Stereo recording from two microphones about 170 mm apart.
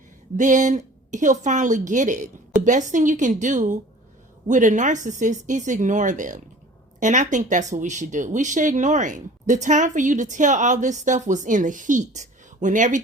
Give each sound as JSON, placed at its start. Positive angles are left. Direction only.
{"t": 0.3, "sound": "speech", "side_deg": -45}